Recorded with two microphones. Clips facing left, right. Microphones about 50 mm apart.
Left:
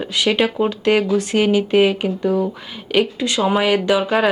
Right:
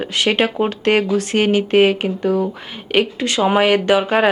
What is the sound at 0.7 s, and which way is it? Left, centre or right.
Speech, right.